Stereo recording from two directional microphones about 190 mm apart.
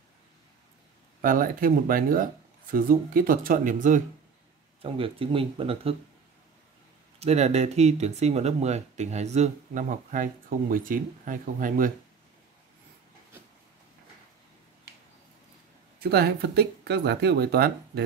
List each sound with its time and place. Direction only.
1.2 s speech: 45° right (ahead or behind)
4.8 s speech: 30° right (ahead or behind)
7.2 s speech: 35° right (ahead or behind)
16.0 s speech: 60° right (ahead or behind)